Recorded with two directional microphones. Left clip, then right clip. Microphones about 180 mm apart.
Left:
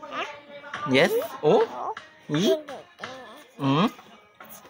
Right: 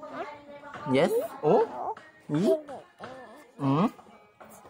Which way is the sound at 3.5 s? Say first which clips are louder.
Left 3 dB; 5° left (ahead or behind).